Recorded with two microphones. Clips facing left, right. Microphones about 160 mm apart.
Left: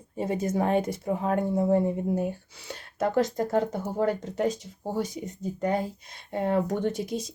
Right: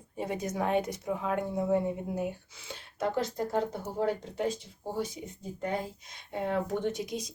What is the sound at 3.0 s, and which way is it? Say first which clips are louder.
Speech: left 6 dB; 50° left (ahead or behind).